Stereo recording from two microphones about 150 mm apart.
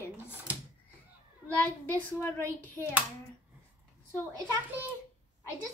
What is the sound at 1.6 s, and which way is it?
A woman's voice, 10° left (ahead or behind).